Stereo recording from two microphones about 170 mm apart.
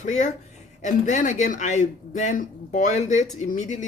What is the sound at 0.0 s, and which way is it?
Speech, 45° left (ahead or behind).